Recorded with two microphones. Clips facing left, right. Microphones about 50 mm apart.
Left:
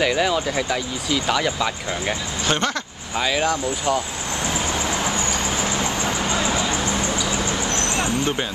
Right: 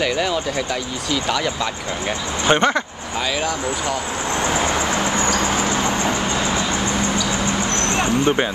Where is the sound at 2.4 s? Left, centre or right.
Right.